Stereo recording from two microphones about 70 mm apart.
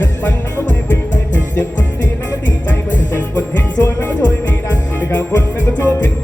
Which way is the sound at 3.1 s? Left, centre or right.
Left.